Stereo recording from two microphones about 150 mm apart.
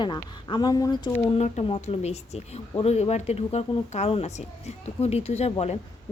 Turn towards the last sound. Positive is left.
turn(degrees=45)  # may be behind; listen again after turning